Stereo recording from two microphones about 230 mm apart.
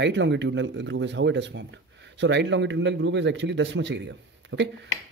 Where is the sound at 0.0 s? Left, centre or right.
Right.